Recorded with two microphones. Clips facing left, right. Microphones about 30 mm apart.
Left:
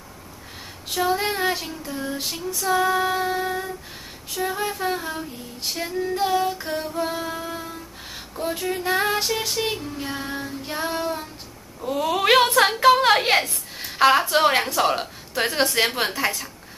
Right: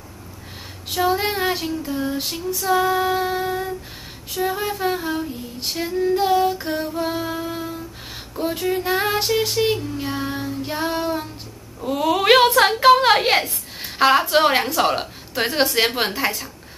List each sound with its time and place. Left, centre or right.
0.9 s female singing: centre
11.8 s a woman's voice: centre
14.3 s female singing: centre